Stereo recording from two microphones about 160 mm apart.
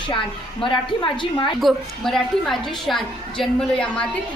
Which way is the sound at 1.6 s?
Centre (ahead or behind).